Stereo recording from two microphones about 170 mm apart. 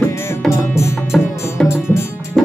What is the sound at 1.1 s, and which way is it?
Music, centre (ahead or behind).